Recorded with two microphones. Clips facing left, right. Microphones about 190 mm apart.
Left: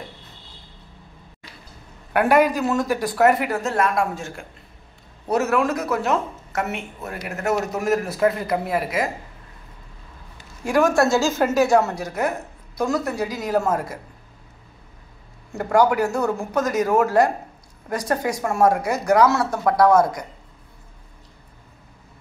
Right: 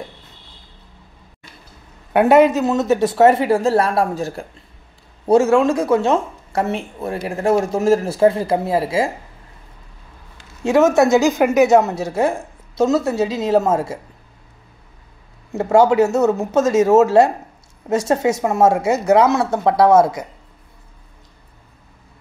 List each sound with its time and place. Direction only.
2.1 s speech: 25° right (ahead or behind)
10.6 s speech: 25° right (ahead or behind)
15.5 s speech: 25° right (ahead or behind)